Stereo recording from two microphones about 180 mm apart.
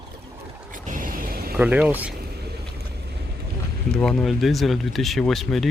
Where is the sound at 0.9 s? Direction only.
50° right (ahead or behind).